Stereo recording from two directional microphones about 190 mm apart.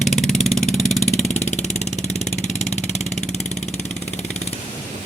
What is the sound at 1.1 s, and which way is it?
Vehicle, 35° left (ahead or behind).